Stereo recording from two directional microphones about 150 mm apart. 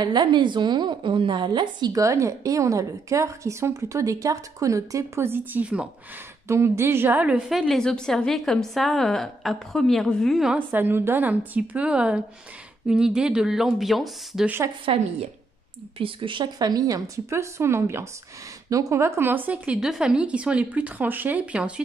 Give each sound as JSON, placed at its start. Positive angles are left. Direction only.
{"t": 0.0, "sound": "a woman's voice", "side_deg": -30}
{"t": 10.7, "sound": "a woman's voice", "side_deg": -15}
{"t": 14.9, "sound": "a woman's voice", "side_deg": -40}